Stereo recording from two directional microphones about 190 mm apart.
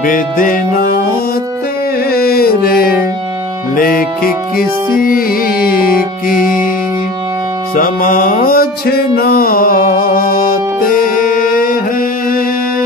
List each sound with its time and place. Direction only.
0.0 s music: 45° left (ahead or behind)
2.0 s music: 55° left (ahead or behind)
7.7 s music: 45° left (ahead or behind)